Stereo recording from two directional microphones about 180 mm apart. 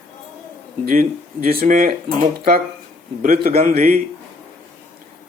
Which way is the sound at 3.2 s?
55° right (ahead or behind).